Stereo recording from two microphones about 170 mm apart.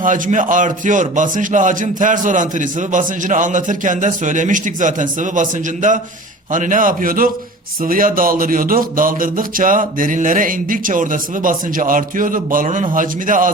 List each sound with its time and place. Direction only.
0.0 s speech: 50° right (ahead or behind)